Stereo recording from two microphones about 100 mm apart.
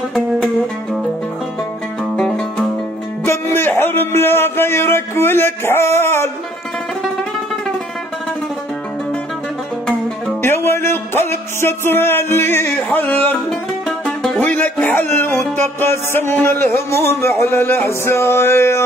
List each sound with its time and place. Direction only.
2.1 s music: 5° left (ahead or behind)
3.3 s a man's voice: 25° left (ahead or behind)
10.4 s music: 25° left (ahead or behind)
13.5 s music: 5° left (ahead or behind)
14.4 s music: 15° left (ahead or behind)